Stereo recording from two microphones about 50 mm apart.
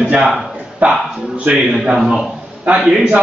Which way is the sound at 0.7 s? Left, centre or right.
Right.